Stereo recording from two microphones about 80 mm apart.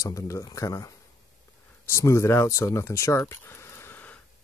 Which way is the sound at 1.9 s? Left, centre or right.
Left.